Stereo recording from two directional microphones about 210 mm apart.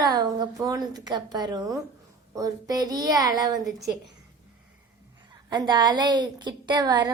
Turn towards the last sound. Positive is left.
turn(degrees=-20)  # may be behind; listen again after turning